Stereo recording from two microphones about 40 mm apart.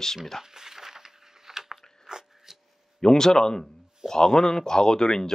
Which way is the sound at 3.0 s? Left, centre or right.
Centre.